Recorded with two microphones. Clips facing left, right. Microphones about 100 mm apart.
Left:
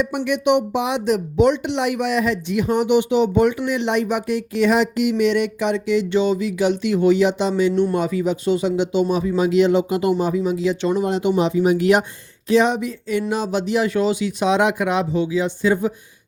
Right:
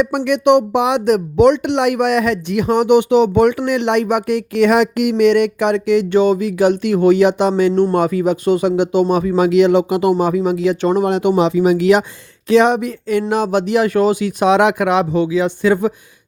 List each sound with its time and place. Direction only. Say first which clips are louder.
0.3 s speech: right 6 dB; 65° right (ahead or behind); by 12.0 s 90° right
12.5 s speech: right 5 dB; 70° right (ahead or behind)